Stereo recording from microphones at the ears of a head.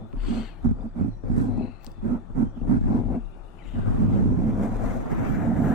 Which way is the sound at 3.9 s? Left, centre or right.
Right.